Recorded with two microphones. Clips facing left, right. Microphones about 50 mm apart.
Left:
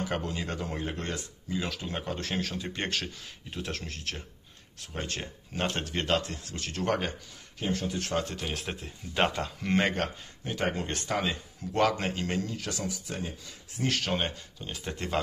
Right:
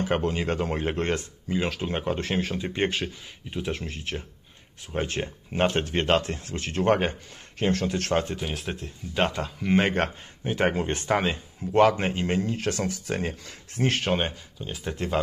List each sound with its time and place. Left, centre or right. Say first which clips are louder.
0.0 s speech: right 7 dB; right
7.5 s speech: right 6 dB; right
8.4 s speech: right 3 dB; centre
10.7 s speech: right 6 dB; right
13.7 s speech: right 5 dB; right
14.1 s speech: right 4 dB; centre
14.7 s speech: right 5 dB; centre